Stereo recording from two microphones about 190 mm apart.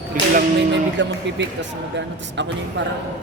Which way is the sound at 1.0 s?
70° right (ahead or behind).